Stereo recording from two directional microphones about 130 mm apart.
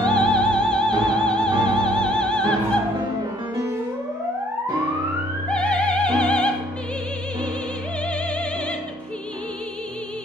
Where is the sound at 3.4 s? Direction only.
20° right (ahead or behind).